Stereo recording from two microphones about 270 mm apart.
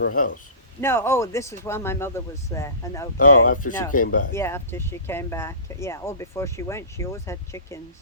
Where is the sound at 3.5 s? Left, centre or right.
Left.